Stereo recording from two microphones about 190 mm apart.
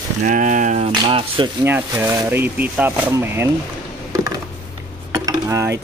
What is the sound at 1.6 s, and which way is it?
Speech, 10° right (ahead or behind).